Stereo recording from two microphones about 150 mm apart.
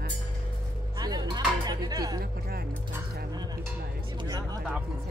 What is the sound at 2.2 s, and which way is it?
Speech, 90° right.